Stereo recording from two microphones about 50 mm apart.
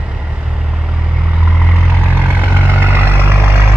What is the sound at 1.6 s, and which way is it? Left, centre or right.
Vehicle, centre.